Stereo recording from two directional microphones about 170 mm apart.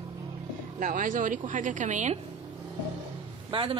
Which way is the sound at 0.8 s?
50° right (ahead or behind).